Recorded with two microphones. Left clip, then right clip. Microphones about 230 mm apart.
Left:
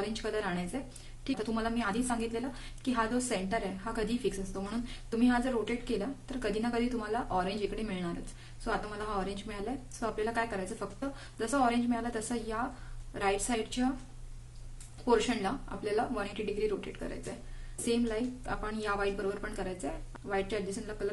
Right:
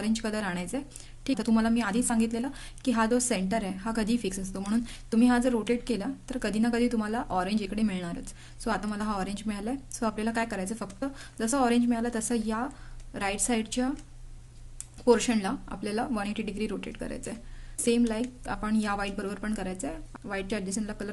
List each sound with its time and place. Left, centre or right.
0.1 s a woman's voice: right
15.0 s a woman's voice: right